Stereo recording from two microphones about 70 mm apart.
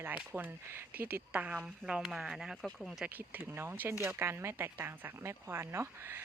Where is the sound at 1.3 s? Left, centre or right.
Centre.